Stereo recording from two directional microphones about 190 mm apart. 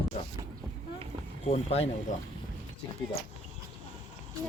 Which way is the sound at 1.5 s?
30° left (ahead or behind).